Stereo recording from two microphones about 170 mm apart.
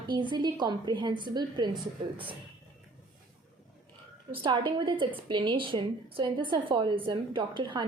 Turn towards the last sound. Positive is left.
turn(degrees=-25)  # may be behind; listen again after turning